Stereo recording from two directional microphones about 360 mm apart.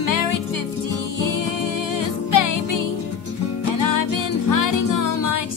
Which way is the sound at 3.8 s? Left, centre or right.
Left.